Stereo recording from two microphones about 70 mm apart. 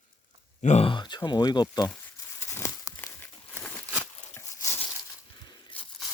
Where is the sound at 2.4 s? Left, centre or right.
Left.